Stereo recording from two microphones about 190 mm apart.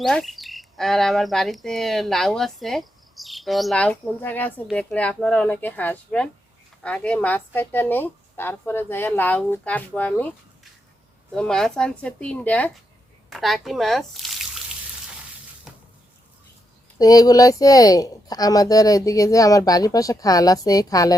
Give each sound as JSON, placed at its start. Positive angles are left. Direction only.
{"t": 0.0, "sound": "a woman's voice", "side_deg": 0}
{"t": 15.7, "sound": "a sound", "side_deg": -5}
{"t": 17.0, "sound": "a woman's voice", "side_deg": 20}